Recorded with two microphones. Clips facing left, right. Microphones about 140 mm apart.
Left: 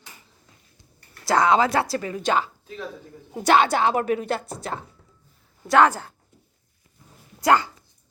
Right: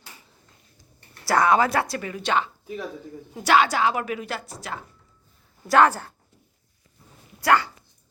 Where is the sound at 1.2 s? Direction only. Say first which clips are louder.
Left 1 dB; 20° left (ahead or behind).